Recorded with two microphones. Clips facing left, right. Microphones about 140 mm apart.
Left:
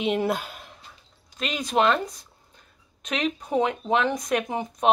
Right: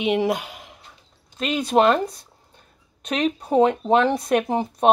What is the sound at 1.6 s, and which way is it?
A woman's voice, 35° right (ahead or behind).